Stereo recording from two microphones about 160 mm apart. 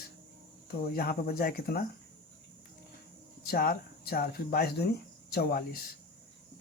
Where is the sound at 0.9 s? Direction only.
70° left (ahead or behind).